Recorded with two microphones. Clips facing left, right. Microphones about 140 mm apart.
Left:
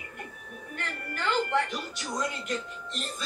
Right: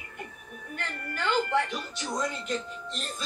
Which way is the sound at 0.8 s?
Centre (ahead or behind).